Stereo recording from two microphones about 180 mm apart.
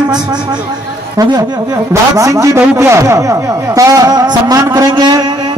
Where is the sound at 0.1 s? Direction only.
25° right (ahead or behind).